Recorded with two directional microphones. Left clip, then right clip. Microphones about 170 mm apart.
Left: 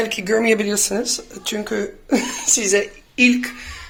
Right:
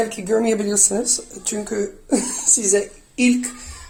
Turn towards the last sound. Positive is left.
turn(degrees=0)  # may be behind; listen again after turning